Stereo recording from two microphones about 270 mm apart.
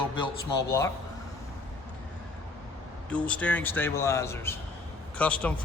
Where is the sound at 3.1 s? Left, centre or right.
Centre.